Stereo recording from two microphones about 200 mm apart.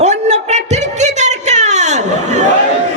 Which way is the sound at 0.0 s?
35° right (ahead or behind).